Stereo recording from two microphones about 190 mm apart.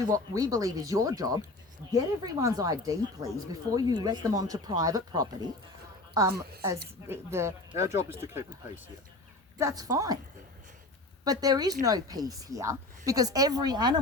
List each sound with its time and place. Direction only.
0.0 s speech: 20° right (ahead or behind)
7.1 s speech: 15° right (ahead or behind)
11.3 s speech: 20° right (ahead or behind)